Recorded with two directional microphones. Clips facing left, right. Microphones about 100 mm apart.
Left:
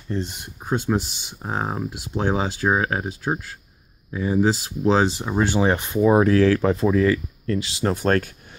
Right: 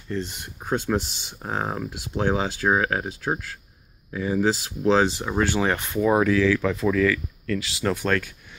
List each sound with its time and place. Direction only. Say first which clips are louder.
0.1 s speech: left 2 dB; 20° left (ahead or behind)
0.7 s speech: left 1 dB; 10° left (ahead or behind)
6.2 s speech: left 3 dB; 45° left (ahead or behind)